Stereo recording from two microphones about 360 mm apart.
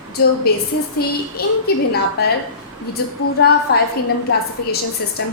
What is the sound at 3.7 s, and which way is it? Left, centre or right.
Speech, left.